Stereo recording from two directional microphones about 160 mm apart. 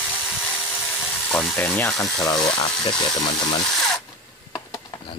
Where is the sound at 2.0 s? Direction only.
25° left (ahead or behind).